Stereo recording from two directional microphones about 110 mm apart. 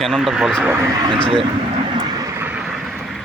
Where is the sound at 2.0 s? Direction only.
40° right (ahead or behind).